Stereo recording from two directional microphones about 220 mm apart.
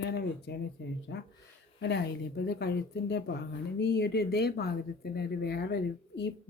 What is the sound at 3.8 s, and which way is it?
Speech, 50° left (ahead or behind).